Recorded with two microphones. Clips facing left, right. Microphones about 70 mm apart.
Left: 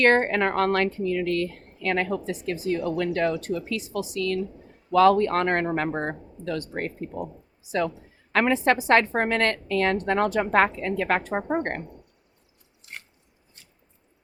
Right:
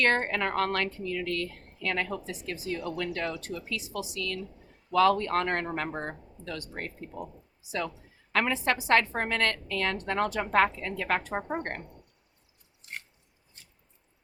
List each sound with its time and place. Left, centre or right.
0.0 s a woman's voice: left
8.3 s a woman's voice: left